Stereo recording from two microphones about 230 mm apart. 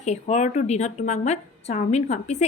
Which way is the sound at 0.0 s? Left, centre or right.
Left.